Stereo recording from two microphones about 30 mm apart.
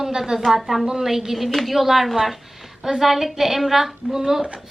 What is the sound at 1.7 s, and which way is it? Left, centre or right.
Speech, centre.